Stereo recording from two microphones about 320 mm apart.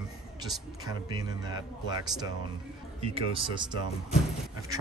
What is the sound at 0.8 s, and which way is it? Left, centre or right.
Speech, centre.